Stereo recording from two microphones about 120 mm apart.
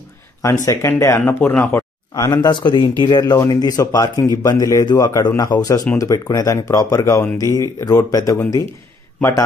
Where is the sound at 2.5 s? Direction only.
40° left (ahead or behind).